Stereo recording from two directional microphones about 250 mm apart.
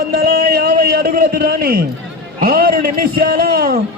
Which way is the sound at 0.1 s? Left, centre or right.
Right.